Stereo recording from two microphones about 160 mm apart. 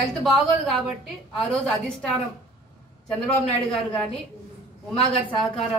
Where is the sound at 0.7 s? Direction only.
5° left (ahead or behind).